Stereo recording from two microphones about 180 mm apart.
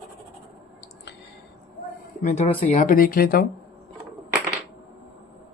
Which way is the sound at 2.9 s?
55° left (ahead or behind).